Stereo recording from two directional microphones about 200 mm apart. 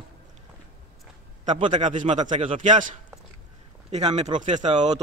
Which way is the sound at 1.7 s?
35° right (ahead or behind).